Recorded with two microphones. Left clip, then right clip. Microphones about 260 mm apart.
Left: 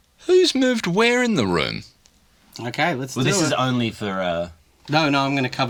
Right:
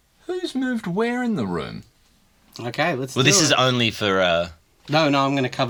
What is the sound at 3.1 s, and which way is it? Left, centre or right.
Speech, right.